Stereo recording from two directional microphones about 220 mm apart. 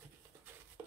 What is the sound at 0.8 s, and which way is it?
Stir, 10° right (ahead or behind).